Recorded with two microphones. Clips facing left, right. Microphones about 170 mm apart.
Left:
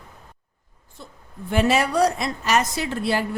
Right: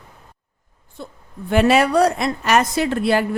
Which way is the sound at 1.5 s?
65° right (ahead or behind).